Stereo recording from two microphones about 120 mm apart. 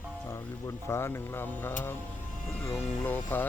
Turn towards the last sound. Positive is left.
turn(degrees=15)  # may be behind; listen again after turning